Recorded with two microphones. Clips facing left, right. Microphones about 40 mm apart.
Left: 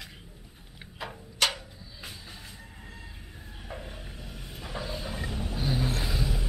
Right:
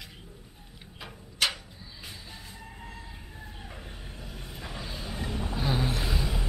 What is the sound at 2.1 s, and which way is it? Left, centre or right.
Music, centre.